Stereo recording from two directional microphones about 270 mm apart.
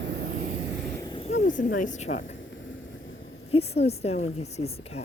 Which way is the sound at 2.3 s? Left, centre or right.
Left.